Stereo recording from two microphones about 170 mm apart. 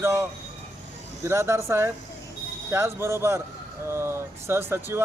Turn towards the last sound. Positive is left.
turn(degrees=-15)  # may be behind; listen again after turning